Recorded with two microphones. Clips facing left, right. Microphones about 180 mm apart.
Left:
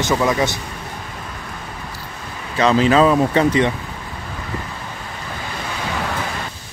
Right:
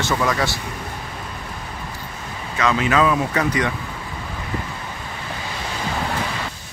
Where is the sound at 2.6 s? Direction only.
30° left (ahead or behind).